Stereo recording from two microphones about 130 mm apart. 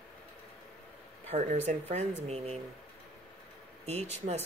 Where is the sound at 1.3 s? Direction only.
60° right (ahead or behind).